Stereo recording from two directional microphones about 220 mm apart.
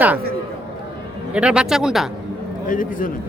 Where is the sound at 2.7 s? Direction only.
40° left (ahead or behind).